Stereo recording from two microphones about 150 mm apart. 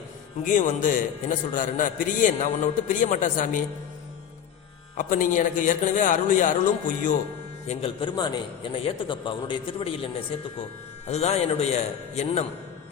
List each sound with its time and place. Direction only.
0.4 s a man's voice: 60° left (ahead or behind)
4.9 s a man's voice: 60° left (ahead or behind)
7.7 s a man's voice: 40° left (ahead or behind)
8.1 s a man's voice: 30° left (ahead or behind)
11.0 s a man's voice: 45° left (ahead or behind)